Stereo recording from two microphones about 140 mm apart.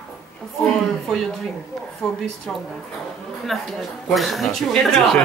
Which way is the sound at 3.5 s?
Centre (ahead or behind).